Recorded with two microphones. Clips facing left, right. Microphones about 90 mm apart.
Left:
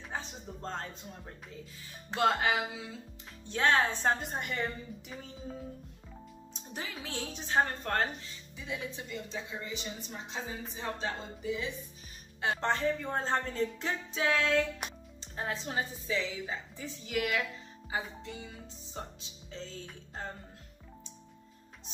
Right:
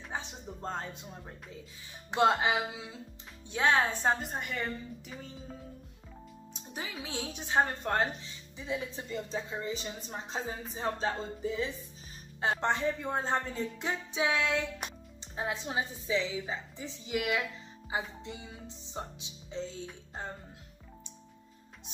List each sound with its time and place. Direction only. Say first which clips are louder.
0.1 s music: right 1 dB; 15° right (ahead or behind)
2.0 s speech: right 2 dB; 20° right (ahead or behind)
3.4 s a woman's voice: even; 5° right (ahead or behind)
6.5 s speech: right 1 dB; 10° right (ahead or behind)
8.5 s a woman's voice: right 3 dB; 25° right (ahead or behind)
12.5 s speech: left 2 dB; 15° right (ahead or behind)